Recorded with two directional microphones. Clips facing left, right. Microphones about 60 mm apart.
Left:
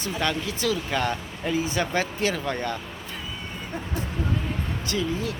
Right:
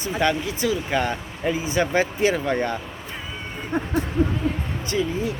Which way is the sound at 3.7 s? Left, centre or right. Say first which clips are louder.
Right 10 dB; right.